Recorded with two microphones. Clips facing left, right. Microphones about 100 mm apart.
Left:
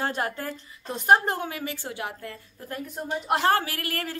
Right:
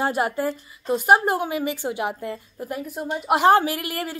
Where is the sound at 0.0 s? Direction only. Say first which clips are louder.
Right 6 dB; 10° right (ahead or behind).